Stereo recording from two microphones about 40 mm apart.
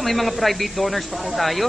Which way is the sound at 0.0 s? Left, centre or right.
Centre.